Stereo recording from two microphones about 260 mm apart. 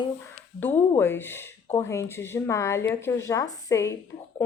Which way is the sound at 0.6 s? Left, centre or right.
Centre.